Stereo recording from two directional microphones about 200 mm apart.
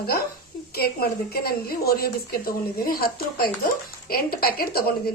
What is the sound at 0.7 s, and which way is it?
A woman's voice, 50° left (ahead or behind).